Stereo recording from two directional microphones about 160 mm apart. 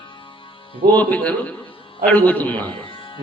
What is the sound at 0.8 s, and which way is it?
Music, 10° left (ahead or behind).